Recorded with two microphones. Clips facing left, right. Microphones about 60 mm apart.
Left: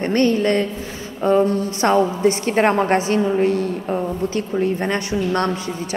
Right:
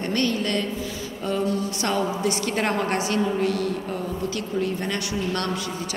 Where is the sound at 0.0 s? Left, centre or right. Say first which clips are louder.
Left 7 dB; left.